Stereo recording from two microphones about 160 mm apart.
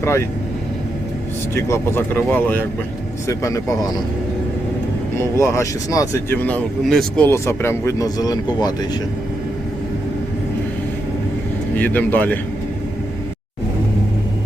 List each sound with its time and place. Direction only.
0.0 s speech: 15° left (ahead or behind)
1.5 s speech: 15° left (ahead or behind)
5.1 s speech: 20° left (ahead or behind)
7.3 s speech: 15° left (ahead or behind)
11.8 s speech: 10° left (ahead or behind)